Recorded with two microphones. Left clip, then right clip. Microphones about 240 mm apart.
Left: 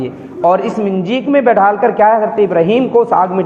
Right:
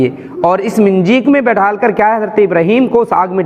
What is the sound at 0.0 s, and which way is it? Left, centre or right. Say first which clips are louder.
A man's voice: right 2 dB; right.